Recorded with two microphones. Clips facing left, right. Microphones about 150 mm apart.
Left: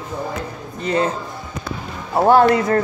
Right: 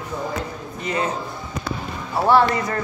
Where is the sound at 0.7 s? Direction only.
30° left (ahead or behind).